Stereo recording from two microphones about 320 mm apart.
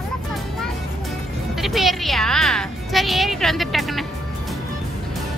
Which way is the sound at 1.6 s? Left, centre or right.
Centre.